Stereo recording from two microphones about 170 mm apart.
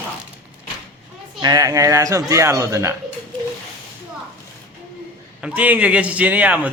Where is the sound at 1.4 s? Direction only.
20° right (ahead or behind).